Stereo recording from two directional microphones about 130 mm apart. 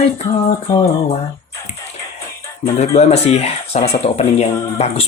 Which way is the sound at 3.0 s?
55° left (ahead or behind).